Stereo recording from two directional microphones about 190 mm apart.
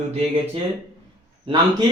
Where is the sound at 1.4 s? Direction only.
25° right (ahead or behind).